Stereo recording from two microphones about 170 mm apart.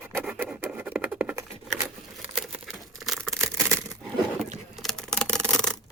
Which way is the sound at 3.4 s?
20° right (ahead or behind).